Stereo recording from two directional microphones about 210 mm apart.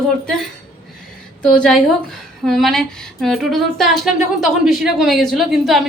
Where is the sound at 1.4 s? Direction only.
5° left (ahead or behind).